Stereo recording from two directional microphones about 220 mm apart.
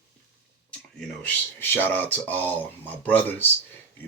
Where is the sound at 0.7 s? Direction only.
5° left (ahead or behind).